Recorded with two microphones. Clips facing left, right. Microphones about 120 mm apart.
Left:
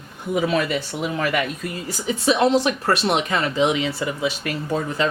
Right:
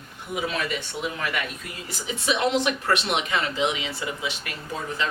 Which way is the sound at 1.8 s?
40° left (ahead or behind).